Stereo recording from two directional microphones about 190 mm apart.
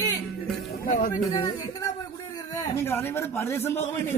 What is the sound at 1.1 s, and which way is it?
A man's voice, 20° left (ahead or behind).